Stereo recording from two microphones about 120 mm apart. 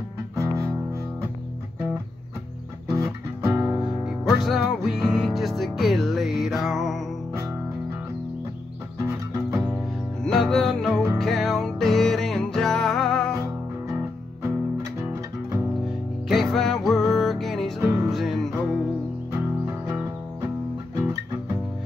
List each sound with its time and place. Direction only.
0.4 s music: 25° right (ahead or behind)
3.0 s music: 25° right (ahead or behind)
3.8 s music: centre (ahead or behind)
9.0 s music: 25° right (ahead or behind)
10.2 s music: centre (ahead or behind)
13.9 s music: 25° right (ahead or behind)
16.3 s music: centre (ahead or behind)
17.8 s music: 20° right (ahead or behind)
18.1 s music: centre (ahead or behind)
19.4 s music: 15° right (ahead or behind)
20.9 s music: 30° right (ahead or behind)